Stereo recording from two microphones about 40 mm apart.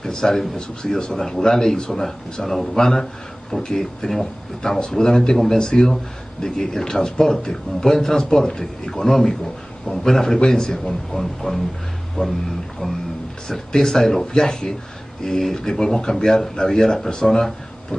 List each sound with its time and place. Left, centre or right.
0.0 s speech: centre
12.2 s speech: left
13.5 s speech: centre